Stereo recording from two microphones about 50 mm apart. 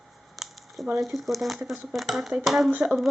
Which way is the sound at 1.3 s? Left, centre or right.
Centre.